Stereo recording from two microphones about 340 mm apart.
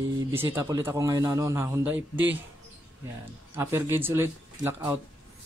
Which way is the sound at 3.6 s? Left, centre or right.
Centre.